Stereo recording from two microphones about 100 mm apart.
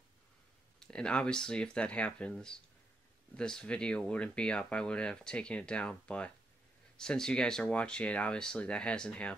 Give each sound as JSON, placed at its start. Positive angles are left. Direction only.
{"t": 0.7, "sound": "speech", "side_deg": 5}